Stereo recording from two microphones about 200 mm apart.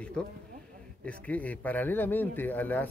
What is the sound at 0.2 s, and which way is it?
Speech, 5° left (ahead or behind).